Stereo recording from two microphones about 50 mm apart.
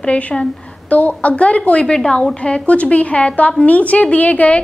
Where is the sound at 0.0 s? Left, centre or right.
Left.